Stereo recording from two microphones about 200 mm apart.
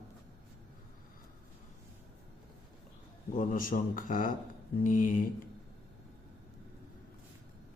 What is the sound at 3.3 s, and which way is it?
A man's voice, 45° left (ahead or behind).